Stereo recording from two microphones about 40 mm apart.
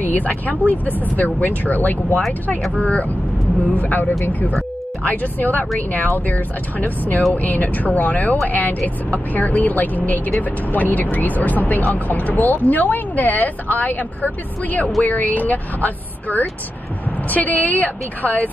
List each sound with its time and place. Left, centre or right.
0.0 s speech: left